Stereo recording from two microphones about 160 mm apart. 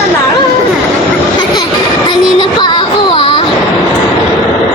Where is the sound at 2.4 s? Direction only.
30° left (ahead or behind).